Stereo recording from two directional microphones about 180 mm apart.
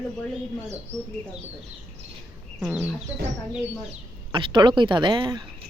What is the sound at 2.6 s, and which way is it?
Chicken, 5° right (ahead or behind).